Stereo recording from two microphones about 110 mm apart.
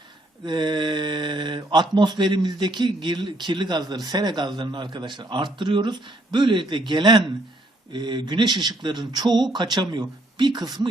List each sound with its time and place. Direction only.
0.4 s speech: 40° right (ahead or behind)